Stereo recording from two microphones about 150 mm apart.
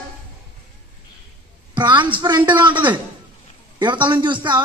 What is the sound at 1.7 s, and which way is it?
A man's voice, 30° right (ahead or behind).